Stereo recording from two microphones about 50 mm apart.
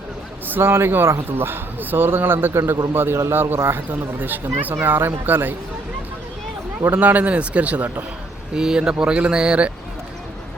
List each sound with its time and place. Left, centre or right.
0.4 s a sound: right
0.7 s a man's voice: right
4.2 s a man's voice: right
6.8 s speech: right
8.5 s speech: centre